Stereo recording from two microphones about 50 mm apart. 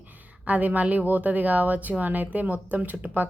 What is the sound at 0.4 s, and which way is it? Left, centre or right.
Speech, right.